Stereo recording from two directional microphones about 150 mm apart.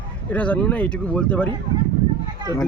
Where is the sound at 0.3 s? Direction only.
10° left (ahead or behind).